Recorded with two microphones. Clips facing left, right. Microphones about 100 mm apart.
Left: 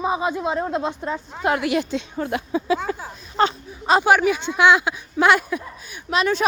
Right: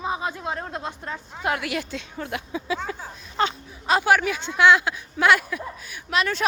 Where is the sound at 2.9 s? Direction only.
40° left (ahead or behind).